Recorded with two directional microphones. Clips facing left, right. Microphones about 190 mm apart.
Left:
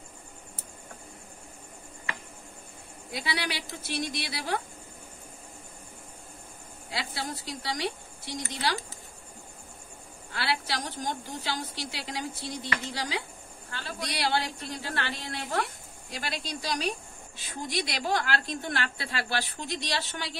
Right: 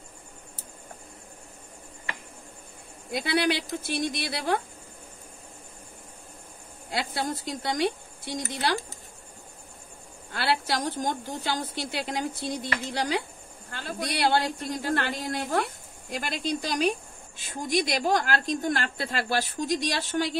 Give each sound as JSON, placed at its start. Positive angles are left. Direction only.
{"t": 3.1, "sound": "a woman's voice", "side_deg": -55}
{"t": 6.9, "sound": "a woman's voice", "side_deg": -55}
{"t": 10.3, "sound": "a woman's voice", "side_deg": -50}